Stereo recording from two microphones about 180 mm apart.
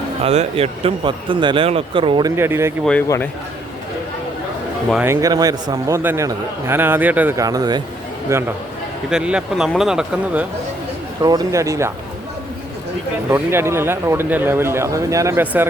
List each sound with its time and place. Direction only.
0.2 s speech: 35° right (ahead or behind)
2.3 s a man's voice: 15° right (ahead or behind)
5.0 s a man's voice: 15° right (ahead or behind)
9.0 s speech: 5° right (ahead or behind)
11.2 s a man's voice: 20° right (ahead or behind)
13.3 s a man's voice: 10° right (ahead or behind)